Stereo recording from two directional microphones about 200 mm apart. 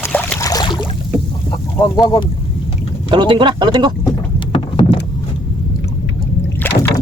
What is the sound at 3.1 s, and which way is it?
Speech, 25° right (ahead or behind).